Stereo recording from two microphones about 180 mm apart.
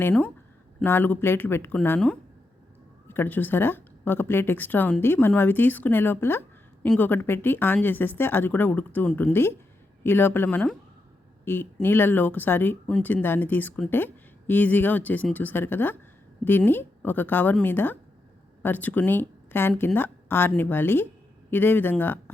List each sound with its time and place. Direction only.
0.0 s speech: 10° left (ahead or behind)